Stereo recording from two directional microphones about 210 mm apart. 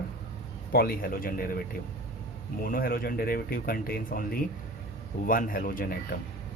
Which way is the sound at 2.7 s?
45° left (ahead or behind).